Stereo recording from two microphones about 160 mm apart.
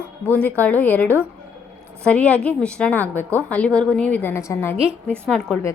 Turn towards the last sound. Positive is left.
turn(degrees=5)  # may be behind; listen again after turning